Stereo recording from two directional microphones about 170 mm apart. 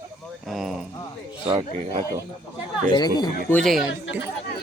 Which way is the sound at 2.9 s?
25° left (ahead or behind).